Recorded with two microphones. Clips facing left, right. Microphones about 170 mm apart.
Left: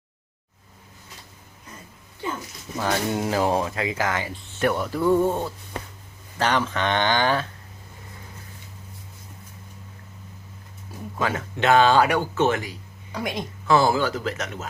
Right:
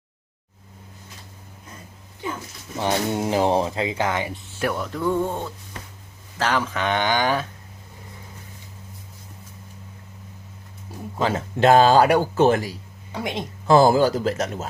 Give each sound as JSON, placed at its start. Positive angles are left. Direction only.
{"t": 2.7, "sound": "speech", "side_deg": -20}
{"t": 4.6, "sound": "music", "side_deg": 0}
{"t": 6.4, "sound": "speech", "side_deg": -5}
{"t": 11.2, "sound": "speech", "side_deg": -30}
{"t": 13.2, "sound": "speech", "side_deg": -25}
{"t": 13.7, "sound": "speech", "side_deg": -40}